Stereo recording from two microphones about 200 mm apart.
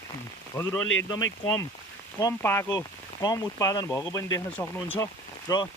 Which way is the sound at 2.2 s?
15° left (ahead or behind).